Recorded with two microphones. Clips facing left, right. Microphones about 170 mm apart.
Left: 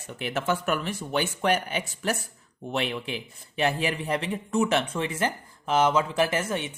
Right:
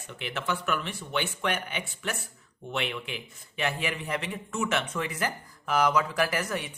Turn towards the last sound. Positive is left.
turn(degrees=25)  # may be behind; listen again after turning